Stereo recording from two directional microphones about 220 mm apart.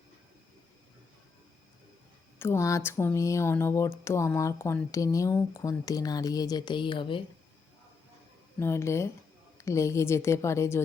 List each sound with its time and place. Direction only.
2.4 s speech: 15° left (ahead or behind)
8.5 s speech: 10° left (ahead or behind)